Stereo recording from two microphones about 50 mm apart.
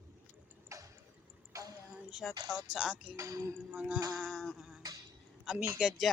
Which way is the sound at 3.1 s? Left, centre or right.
Right.